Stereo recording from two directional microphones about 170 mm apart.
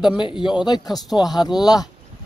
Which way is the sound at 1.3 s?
25° left (ahead or behind).